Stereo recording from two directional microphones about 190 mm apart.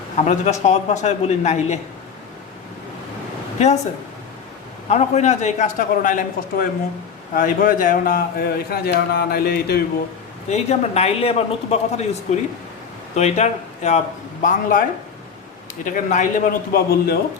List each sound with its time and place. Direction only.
0.3 s a man's voice: 35° left (ahead or behind)
4.9 s a man's voice: 35° left (ahead or behind); by 9.8 s 55° left (ahead or behind)
10.5 s a man's voice: 35° left (ahead or behind); by 17.2 s 50° left (ahead or behind)